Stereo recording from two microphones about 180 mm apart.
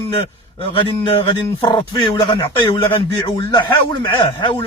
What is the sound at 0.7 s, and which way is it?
A man's voice, 30° left (ahead or behind).